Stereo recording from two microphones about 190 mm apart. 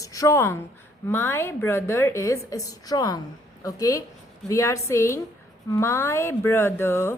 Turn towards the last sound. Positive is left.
turn(degrees=15)  # may be behind; listen again after turning